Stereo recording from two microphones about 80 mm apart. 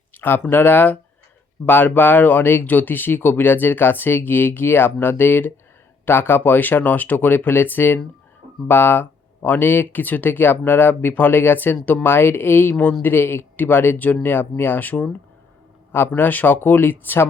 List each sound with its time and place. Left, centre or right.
0.2 s speech: left